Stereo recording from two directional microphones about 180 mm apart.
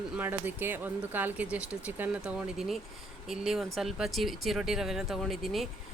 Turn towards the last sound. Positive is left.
turn(degrees=0)  # may be behind; listen again after turning